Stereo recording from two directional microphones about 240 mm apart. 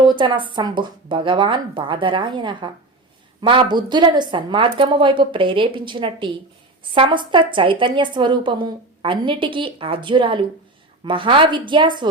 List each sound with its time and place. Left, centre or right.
0.0 s a woman's voice: centre